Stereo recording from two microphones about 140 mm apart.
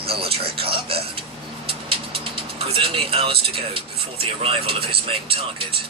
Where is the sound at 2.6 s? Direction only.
40° right (ahead or behind).